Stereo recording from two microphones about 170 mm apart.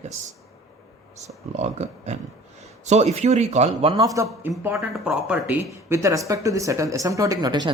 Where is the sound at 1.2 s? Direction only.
40° right (ahead or behind).